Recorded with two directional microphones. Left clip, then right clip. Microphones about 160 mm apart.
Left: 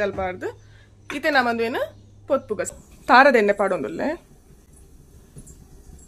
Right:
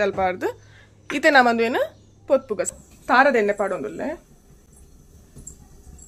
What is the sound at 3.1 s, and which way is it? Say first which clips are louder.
A woman's voice: left 3 dB; 25° left (ahead or behind).